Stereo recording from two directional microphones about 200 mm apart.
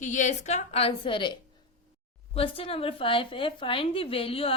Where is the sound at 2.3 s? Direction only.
25° left (ahead or behind).